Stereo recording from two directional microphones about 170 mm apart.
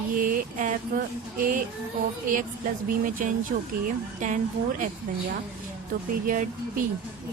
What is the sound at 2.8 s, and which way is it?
Speech, 55° right (ahead or behind).